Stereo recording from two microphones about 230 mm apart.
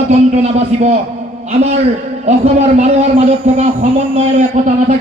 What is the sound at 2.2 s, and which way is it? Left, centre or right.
A man's voice, right.